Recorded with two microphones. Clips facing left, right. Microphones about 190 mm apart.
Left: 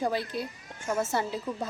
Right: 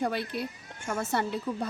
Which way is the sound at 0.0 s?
60° right (ahead or behind).